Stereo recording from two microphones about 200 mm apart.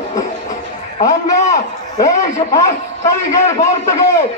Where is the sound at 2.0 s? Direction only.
15° left (ahead or behind).